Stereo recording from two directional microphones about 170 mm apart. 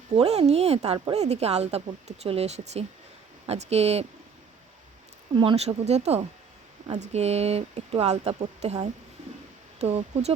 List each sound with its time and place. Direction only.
0.2 s speech: 35° right (ahead or behind)
5.3 s speech: 30° right (ahead or behind)